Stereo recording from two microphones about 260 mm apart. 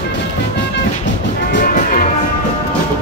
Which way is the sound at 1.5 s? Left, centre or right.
Left.